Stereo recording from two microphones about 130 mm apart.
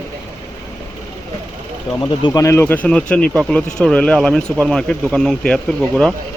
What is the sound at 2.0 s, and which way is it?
Speech, 35° left (ahead or behind).